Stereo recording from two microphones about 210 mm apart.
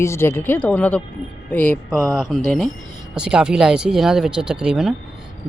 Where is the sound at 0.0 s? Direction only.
10° left (ahead or behind).